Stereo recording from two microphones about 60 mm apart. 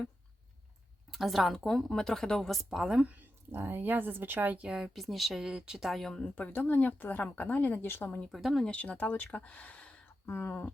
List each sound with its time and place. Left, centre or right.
1.1 s a woman's voice: centre
2.6 s speech: centre
3.1 s speech: right
4.6 s speech: centre
4.9 s speech: centre
5.9 s a woman's voice: centre
6.3 s a woman's voice: left
8.3 s a woman's voice: centre
8.7 s a woman's voice: left
10.2 s speech: left